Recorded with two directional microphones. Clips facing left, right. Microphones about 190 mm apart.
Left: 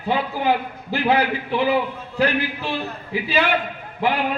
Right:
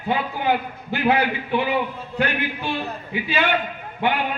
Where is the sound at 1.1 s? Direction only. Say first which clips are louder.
Left 2 dB; 30° left (ahead or behind).